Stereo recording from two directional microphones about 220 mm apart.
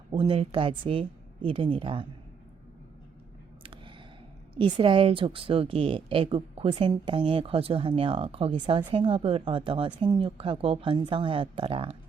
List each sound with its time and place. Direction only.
0.1 s a woman's voice: 25° right (ahead or behind)
4.5 s a woman's voice: 25° right (ahead or behind)